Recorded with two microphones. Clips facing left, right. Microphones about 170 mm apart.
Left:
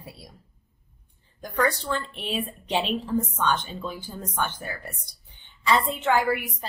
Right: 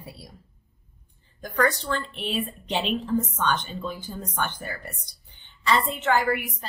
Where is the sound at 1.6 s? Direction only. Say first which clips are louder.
Right 1 dB; centre (ahead or behind).